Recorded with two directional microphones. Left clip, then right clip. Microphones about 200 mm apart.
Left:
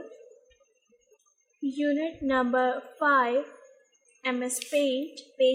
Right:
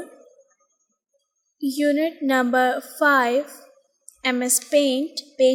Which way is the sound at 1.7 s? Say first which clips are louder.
Right 8 dB; 30° right (ahead or behind).